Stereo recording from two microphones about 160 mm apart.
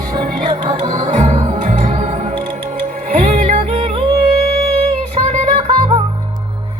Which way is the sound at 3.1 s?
55° right (ahead or behind).